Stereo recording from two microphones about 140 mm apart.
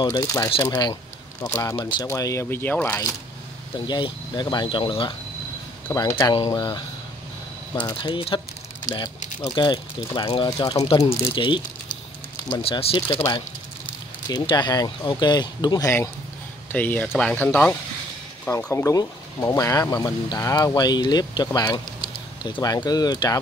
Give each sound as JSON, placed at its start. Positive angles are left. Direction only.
{"t": 0.0, "sound": "speech", "side_deg": 25}
{"t": 3.7, "sound": "speech", "side_deg": 35}
{"t": 7.8, "sound": "speech", "side_deg": 35}
{"t": 14.3, "sound": "speech", "side_deg": 35}
{"t": 16.7, "sound": "speech", "side_deg": 10}